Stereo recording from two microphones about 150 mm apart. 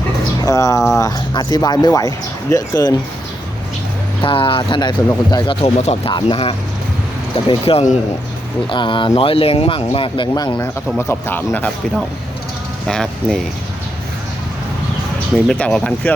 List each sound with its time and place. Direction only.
0.4 s speech: 20° left (ahead or behind)
4.2 s speech: 35° left (ahead or behind)
5.6 s speech: 45° left (ahead or behind); by 11.7 s 10° left (ahead or behind)
12.9 s speech: centre (ahead or behind)
15.4 s speech: 5° left (ahead or behind)